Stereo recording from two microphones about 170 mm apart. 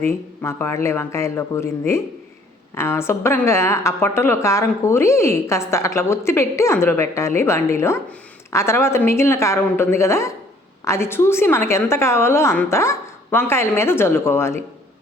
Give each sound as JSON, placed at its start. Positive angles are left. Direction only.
{"t": 0.0, "sound": "a woman's voice", "side_deg": 15}